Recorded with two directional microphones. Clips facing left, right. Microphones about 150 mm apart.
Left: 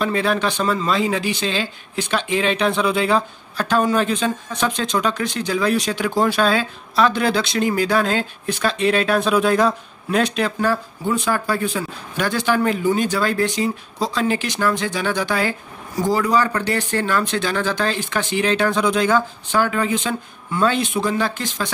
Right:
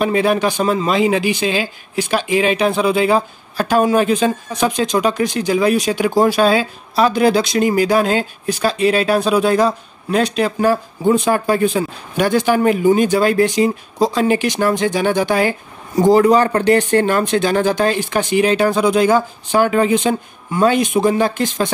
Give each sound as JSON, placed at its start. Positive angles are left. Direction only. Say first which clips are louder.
{"t": 0.0, "sound": "speech", "louder": "right 5 dB", "side_deg": -10}
{"t": 10.6, "sound": "speech", "louder": "right 6 dB", "side_deg": -15}
{"t": 16.3, "sound": "speech", "louder": "right 6 dB", "side_deg": -50}
{"t": 17.8, "sound": "speech", "louder": "right 5 dB", "side_deg": -15}